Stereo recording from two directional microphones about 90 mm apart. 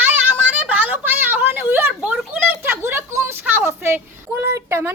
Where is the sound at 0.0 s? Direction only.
20° right (ahead or behind).